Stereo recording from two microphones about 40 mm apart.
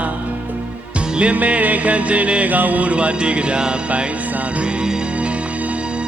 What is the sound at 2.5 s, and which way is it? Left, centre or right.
Music, right.